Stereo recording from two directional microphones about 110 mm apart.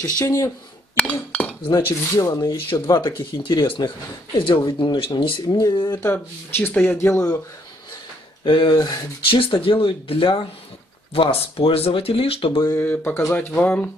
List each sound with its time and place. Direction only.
0.0 s speech: 30° left (ahead or behind)
0.9 s chink: 10° left (ahead or behind)
2.1 s speech: 30° left (ahead or behind)
2.9 s speech: 45° left (ahead or behind)
5.5 s speech: 35° left (ahead or behind)
6.0 s speech: 20° left (ahead or behind)
7.0 s speech: 25° left (ahead or behind)
8.5 s speech: 45° left (ahead or behind)
9.3 s speech: 55° left (ahead or behind)
12.7 s speech: 15° left (ahead or behind)